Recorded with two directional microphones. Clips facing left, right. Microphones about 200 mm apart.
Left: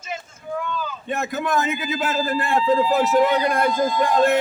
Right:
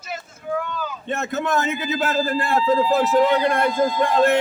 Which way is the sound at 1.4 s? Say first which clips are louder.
Even; 30° right (ahead or behind).